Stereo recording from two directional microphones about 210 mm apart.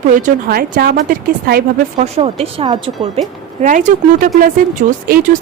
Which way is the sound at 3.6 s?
35° right (ahead or behind).